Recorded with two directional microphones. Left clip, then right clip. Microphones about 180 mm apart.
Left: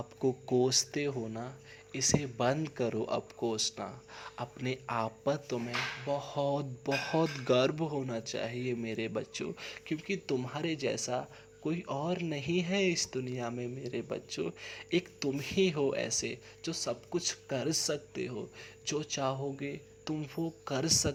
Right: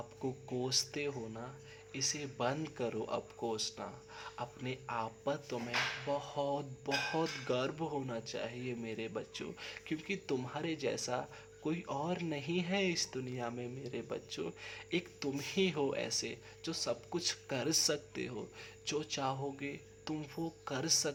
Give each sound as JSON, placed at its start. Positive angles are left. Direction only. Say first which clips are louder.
{"t": 0.2, "sound": "speech", "louder": "left 11 dB", "side_deg": 30}